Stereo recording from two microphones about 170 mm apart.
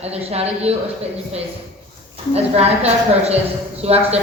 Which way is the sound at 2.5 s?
40° right (ahead or behind).